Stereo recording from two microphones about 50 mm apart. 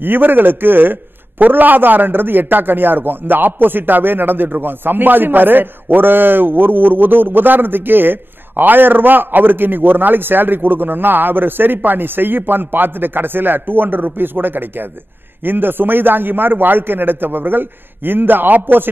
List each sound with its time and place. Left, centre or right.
0.0 s a man's voice: right